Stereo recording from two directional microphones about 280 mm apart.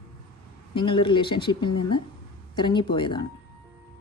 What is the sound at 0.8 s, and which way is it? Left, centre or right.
A woman's voice, centre.